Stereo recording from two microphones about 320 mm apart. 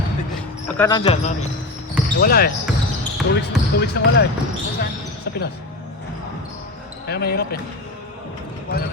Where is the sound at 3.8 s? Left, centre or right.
Left.